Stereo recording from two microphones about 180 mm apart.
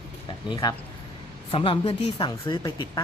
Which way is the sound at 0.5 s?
20° left (ahead or behind).